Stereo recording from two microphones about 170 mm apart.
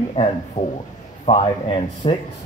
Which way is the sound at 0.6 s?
50° left (ahead or behind).